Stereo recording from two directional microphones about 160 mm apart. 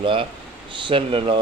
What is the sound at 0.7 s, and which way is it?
Speech, 30° right (ahead or behind).